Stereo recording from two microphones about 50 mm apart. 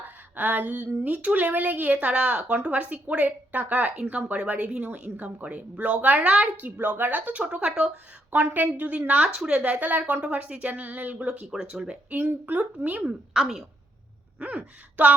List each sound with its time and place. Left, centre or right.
0.3 s speech: right
6.7 s speech: right
10.2 s speech: right
11.5 s speech: centre
12.1 s speech: right
13.3 s speech: centre
14.3 s speech: right